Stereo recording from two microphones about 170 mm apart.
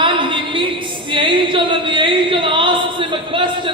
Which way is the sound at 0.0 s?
30° right (ahead or behind).